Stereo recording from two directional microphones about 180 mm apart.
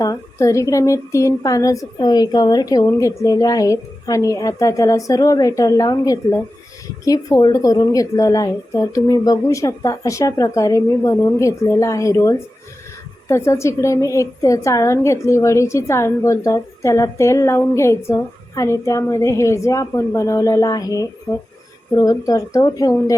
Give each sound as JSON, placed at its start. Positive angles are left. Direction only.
{"t": 0.0, "sound": "a woman's voice", "side_deg": 20}